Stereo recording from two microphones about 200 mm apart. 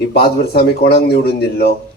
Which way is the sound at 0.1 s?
50° left (ahead or behind).